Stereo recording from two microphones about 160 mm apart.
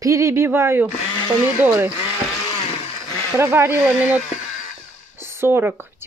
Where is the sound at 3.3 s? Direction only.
15° right (ahead or behind).